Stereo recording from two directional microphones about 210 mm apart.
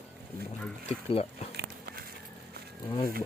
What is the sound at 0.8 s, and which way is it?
Speech, 30° left (ahead or behind).